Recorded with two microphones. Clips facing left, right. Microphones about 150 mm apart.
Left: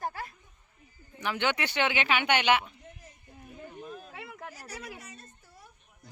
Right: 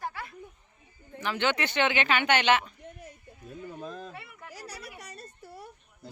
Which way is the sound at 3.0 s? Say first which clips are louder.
Right 4 dB; 90° right.